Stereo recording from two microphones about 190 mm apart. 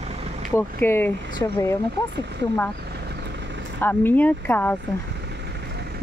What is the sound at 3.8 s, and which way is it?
Speech, 10° left (ahead or behind).